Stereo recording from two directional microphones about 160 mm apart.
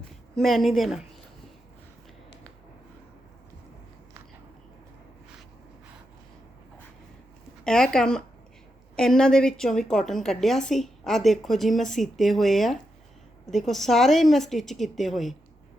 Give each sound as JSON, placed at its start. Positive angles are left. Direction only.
{"t": 0.3, "sound": "a woman's voice", "side_deg": 0}
{"t": 7.6, "sound": "a woman's voice", "side_deg": 5}